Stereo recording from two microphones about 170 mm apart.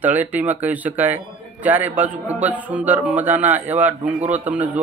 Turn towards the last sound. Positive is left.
turn(degrees=-10)  # may be behind; listen again after turning